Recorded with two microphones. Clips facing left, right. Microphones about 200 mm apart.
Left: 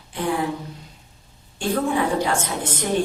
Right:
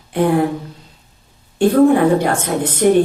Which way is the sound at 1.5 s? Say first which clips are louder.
Right 11 dB; 60° right (ahead or behind).